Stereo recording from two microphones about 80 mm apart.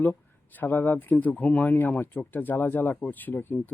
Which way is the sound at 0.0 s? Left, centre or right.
Left.